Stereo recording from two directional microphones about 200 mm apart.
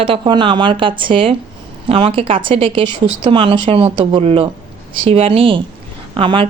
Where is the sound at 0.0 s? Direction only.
25° right (ahead or behind).